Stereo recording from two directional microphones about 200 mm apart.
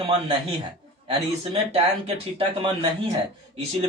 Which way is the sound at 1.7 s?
30° right (ahead or behind).